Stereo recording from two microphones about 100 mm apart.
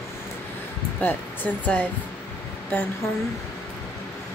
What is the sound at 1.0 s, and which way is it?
Speech, 15° left (ahead or behind).